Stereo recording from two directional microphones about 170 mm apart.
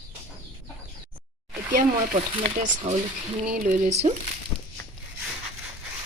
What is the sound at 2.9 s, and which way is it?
Speech, 40° right (ahead or behind).